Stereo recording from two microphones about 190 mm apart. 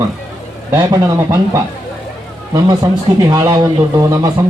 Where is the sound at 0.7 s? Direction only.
20° right (ahead or behind).